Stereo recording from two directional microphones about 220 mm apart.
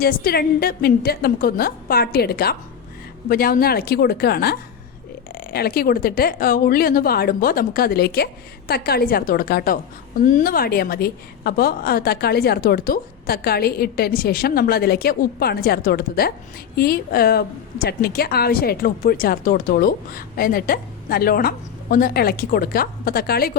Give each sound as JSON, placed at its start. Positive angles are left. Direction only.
{"t": 0.0, "sound": "a woman's voice", "side_deg": 45}